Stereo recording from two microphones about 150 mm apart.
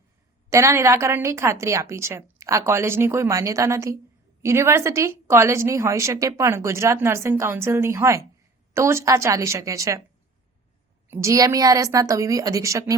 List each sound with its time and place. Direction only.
0.5 s a woman's voice: 20° right (ahead or behind)
11.1 s a woman's voice: 20° right (ahead or behind)